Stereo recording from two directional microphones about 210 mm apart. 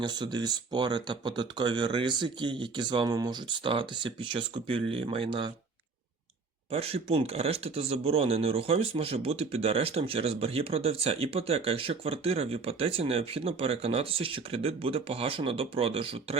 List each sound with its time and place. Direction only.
0.0 s speech: 20° right (ahead or behind)
6.7 s speech: 30° right (ahead or behind)